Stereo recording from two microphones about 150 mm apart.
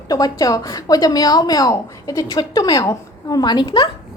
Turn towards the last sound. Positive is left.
turn(degrees=30)  # may be behind; listen again after turning